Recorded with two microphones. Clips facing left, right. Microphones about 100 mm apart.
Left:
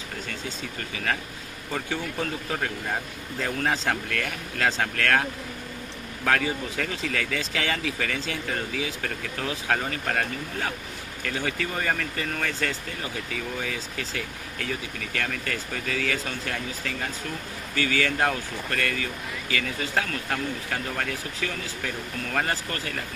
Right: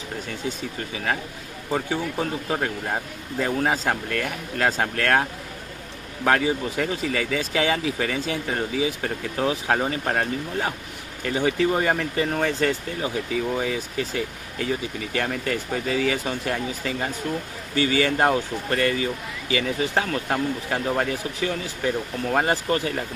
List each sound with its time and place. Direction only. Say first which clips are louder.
1.7 s speech: right 5 dB; 15° right (ahead or behind)
6.2 s speech: right 4 dB; 15° right (ahead or behind)